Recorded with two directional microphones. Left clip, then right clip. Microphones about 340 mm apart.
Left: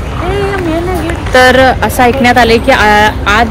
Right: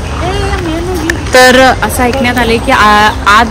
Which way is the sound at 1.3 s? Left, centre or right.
Right.